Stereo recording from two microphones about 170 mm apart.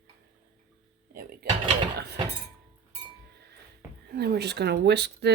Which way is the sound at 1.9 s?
75° right (ahead or behind).